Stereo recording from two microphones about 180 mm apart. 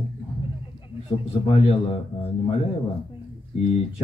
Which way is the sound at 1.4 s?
30° left (ahead or behind).